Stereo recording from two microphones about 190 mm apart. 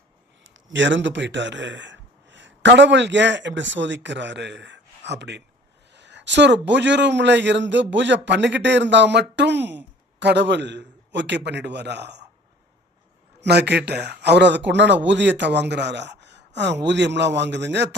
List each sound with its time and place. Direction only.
0.7 s a man's voice: 75° right (ahead or behind)
13.4 s a man's voice: 65° right (ahead or behind)